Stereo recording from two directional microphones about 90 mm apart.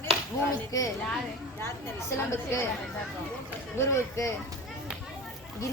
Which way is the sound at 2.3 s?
30° left (ahead or behind).